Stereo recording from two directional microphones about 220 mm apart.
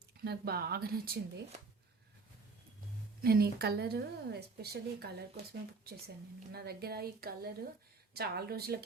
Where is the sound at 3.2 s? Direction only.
45° right (ahead or behind).